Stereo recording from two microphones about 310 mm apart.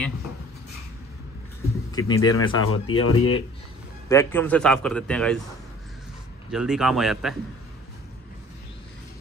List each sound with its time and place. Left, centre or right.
1.9 s speech: centre
2.6 s speech: left
4.1 s a man's voice: centre
6.5 s a man's voice: centre